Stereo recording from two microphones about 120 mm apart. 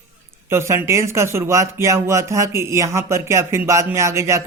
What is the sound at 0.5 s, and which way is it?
A man's voice, 20° right (ahead or behind).